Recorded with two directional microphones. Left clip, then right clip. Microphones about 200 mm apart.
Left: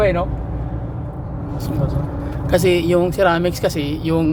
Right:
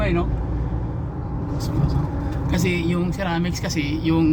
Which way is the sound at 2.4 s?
45° left (ahead or behind).